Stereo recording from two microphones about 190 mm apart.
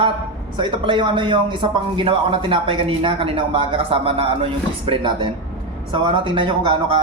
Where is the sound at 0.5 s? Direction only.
25° right (ahead or behind).